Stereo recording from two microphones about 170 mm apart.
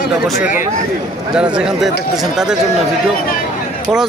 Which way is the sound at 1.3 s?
5° right (ahead or behind).